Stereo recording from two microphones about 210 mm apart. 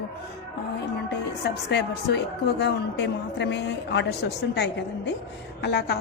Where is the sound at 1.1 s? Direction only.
50° left (ahead or behind).